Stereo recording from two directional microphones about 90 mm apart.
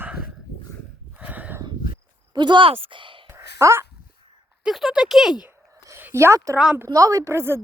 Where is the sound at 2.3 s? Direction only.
55° right (ahead or behind).